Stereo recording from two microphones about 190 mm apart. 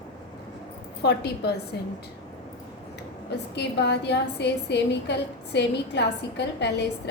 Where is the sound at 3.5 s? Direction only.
65° left (ahead or behind).